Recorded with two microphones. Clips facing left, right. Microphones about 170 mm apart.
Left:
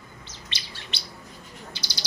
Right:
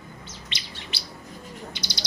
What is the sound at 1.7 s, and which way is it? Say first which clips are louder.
Bird: right 3 dB; 20° right (ahead or behind).